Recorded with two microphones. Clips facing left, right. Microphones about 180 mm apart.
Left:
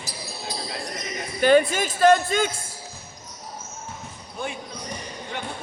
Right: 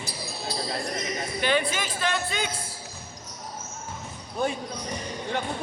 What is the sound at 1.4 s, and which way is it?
Speech, 45° left (ahead or behind).